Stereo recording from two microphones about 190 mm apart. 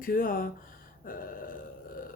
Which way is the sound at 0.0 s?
45° left (ahead or behind).